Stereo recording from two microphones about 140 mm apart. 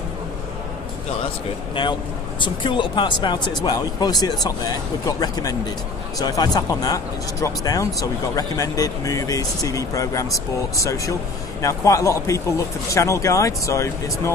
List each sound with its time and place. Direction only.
2.4 s speech: 35° left (ahead or behind)